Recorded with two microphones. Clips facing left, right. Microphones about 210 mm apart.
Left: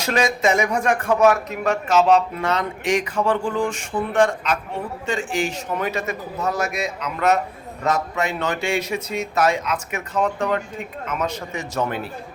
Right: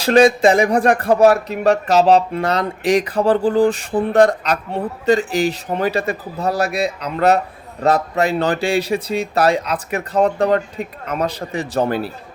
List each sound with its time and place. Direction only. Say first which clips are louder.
0.0 s a man's voice: right 8 dB; 30° right (ahead or behind)